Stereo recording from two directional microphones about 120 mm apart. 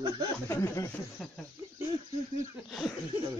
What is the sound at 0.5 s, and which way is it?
Speech, 25° left (ahead or behind).